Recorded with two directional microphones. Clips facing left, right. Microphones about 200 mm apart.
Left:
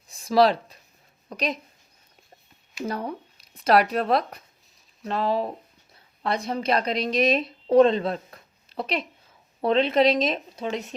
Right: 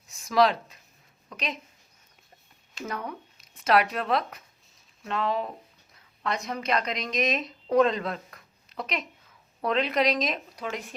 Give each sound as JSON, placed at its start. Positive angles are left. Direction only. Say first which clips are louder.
{"t": 0.1, "sound": "a sound", "louder": "left 3 dB", "side_deg": 30}
{"t": 1.3, "sound": "speech", "louder": "left 6 dB", "side_deg": 35}
{"t": 2.8, "sound": "a woman's voice", "louder": "left 5 dB", "side_deg": 30}